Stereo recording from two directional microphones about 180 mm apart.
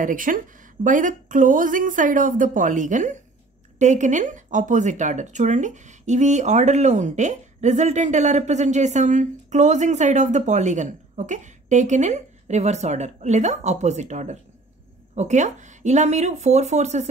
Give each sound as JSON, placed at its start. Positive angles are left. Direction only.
{"t": 0.0, "sound": "a woman's voice", "side_deg": -50}